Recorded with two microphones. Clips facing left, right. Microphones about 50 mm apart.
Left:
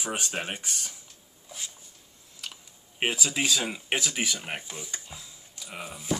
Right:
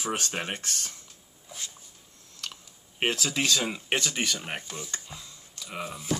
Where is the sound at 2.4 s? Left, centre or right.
Centre.